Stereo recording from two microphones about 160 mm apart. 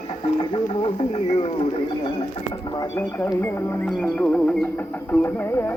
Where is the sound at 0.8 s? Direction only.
35° left (ahead or behind).